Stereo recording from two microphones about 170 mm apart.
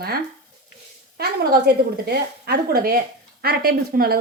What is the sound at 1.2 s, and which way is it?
A woman's voice, 70° right (ahead or behind).